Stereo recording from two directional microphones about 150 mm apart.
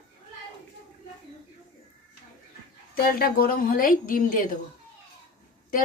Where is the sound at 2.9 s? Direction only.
85° left; by 4.5 s 65° left (ahead or behind).